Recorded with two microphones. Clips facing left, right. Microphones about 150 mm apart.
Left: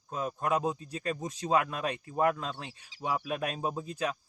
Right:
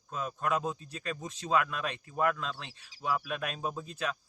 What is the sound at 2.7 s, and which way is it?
Speech, 25° left (ahead or behind).